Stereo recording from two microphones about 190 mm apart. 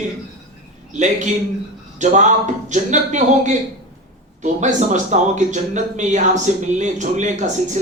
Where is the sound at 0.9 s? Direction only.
40° right (ahead or behind).